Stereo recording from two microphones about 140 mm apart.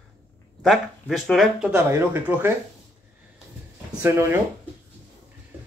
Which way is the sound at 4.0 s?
20° right (ahead or behind).